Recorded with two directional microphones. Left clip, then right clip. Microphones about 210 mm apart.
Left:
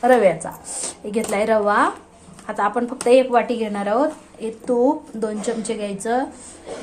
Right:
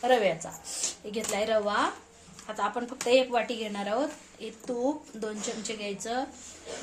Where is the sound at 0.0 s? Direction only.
10° left (ahead or behind).